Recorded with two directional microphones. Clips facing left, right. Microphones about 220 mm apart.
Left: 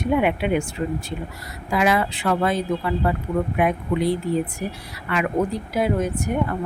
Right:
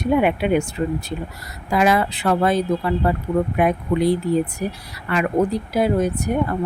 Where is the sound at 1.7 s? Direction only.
40° right (ahead or behind).